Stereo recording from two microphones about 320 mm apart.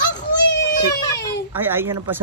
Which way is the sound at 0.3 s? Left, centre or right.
Left.